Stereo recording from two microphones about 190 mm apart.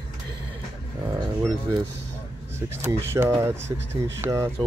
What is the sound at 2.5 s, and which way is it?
Speech, 15° right (ahead or behind).